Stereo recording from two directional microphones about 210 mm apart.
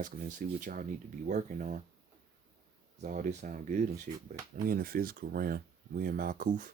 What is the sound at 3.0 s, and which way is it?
Speech, 35° right (ahead or behind).